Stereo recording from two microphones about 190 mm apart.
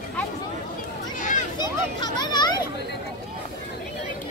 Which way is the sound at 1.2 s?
40° left (ahead or behind).